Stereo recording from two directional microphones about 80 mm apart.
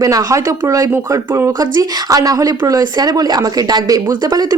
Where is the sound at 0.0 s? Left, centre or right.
Right.